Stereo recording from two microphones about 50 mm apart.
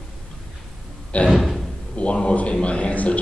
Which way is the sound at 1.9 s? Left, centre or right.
Left.